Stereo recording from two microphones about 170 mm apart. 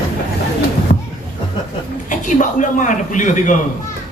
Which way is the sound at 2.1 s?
50° left (ahead or behind).